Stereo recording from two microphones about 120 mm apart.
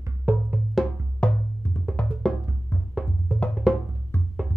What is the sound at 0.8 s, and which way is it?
Music, centre (ahead or behind).